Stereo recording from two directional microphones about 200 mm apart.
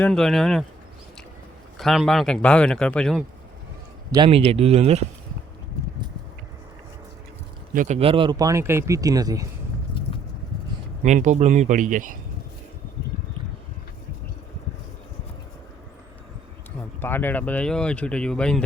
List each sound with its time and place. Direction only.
0.0 s speech: 5° left (ahead or behind)
1.8 s speech: centre (ahead or behind)
4.1 s speech: 25° right (ahead or behind)
7.7 s speech: 45° right (ahead or behind)
7.9 s speech: 25° right (ahead or behind)
11.0 s speech: 35° right (ahead or behind)
17.0 s speech: 10° left (ahead or behind)